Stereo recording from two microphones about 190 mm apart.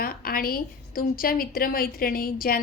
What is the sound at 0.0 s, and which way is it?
A woman's voice, 50° left (ahead or behind).